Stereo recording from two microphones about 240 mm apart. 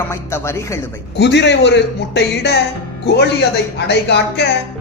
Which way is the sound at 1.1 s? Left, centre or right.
Left.